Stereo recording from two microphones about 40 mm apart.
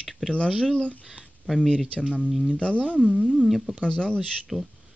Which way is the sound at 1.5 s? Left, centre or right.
Centre.